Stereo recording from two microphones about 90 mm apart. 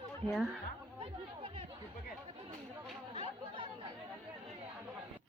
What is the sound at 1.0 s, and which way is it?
Chatter, 90° right.